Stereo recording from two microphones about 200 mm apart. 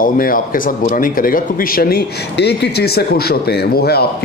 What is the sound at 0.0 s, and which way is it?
Speech, 45° left (ahead or behind).